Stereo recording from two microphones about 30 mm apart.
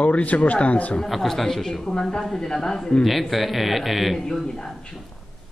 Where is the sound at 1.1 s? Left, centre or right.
Centre.